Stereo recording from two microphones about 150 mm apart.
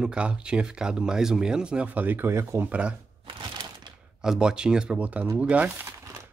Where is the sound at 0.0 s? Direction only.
5° right (ahead or behind).